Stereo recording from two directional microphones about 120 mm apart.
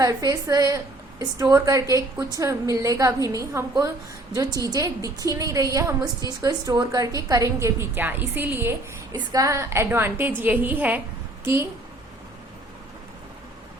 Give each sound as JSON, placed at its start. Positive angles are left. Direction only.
{"t": 0.0, "sound": "a woman's voice", "side_deg": -30}
{"t": 9.1, "sound": "a woman's voice", "side_deg": -30}